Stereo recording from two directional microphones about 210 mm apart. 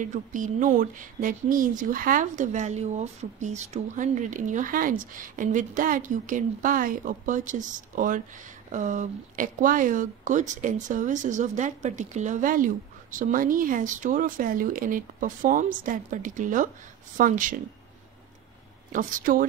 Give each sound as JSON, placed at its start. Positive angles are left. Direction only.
{"t": 0.0, "sound": "speech", "side_deg": -35}
{"t": 18.9, "sound": "speech", "side_deg": -40}